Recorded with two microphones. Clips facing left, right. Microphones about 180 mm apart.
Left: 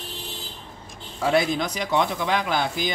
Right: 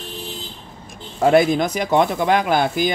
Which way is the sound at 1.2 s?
50° right (ahead or behind).